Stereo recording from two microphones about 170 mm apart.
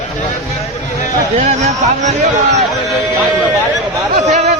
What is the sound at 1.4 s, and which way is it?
Speech, 45° right (ahead or behind).